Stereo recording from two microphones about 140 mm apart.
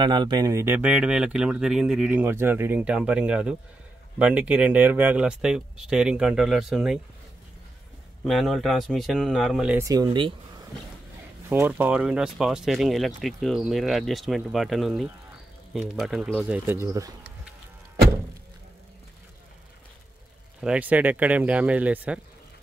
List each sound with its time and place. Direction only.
0.0 s speech: 30° right (ahead or behind); by 7.0 s 5° right (ahead or behind)
8.2 s speech: centre (ahead or behind)
9.8 s speech: 25° right (ahead or behind)
11.4 s speech: 15° right (ahead or behind); by 16.4 s centre (ahead or behind)
16.4 s speech: 15° right (ahead or behind)
20.6 s speech: 10° right (ahead or behind)